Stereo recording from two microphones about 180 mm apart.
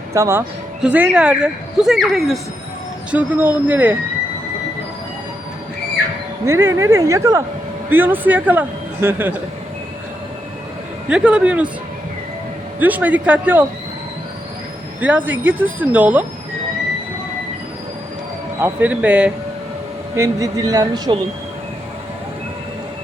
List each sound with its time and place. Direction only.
0.1 s a man's voice: 15° right (ahead or behind)
6.4 s a man's voice: 15° right (ahead or behind)
11.1 s a man's voice: 5° right (ahead or behind)
12.8 s a man's voice: 10° right (ahead or behind)
15.0 s a man's voice: 10° right (ahead or behind)
18.6 s a man's voice: 10° right (ahead or behind)
20.1 s speech: 15° right (ahead or behind)